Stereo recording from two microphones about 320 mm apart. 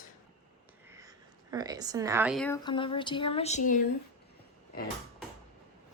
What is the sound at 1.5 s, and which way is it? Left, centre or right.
A woman's voice, centre.